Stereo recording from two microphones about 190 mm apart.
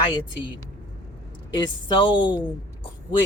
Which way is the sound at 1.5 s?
25° left (ahead or behind).